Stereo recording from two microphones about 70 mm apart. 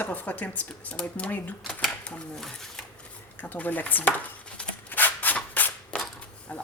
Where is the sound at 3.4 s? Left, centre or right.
Left.